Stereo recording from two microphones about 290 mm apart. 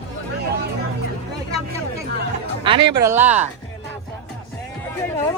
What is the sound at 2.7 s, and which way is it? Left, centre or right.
Speech, centre.